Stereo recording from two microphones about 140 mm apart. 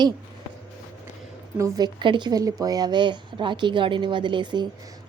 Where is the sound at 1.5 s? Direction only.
25° right (ahead or behind).